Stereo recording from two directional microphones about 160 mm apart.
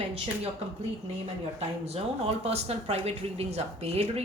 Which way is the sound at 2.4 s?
40° right (ahead or behind).